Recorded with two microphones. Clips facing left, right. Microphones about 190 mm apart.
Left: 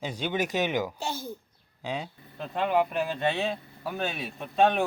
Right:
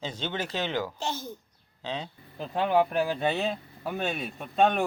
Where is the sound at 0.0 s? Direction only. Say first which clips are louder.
Left 3 dB; 10° left (ahead or behind).